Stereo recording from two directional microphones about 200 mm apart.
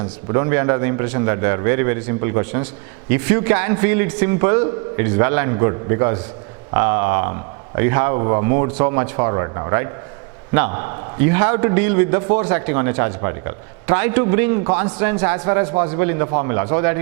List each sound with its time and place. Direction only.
0.0 s a man's voice: 20° right (ahead or behind)